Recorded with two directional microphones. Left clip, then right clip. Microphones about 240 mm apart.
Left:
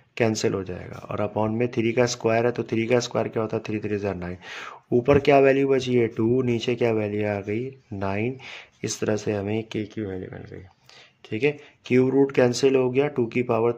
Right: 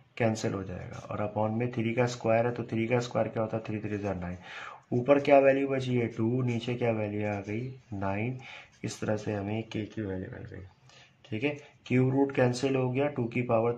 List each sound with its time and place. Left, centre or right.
0.1 s speech: left
11.2 s speech: left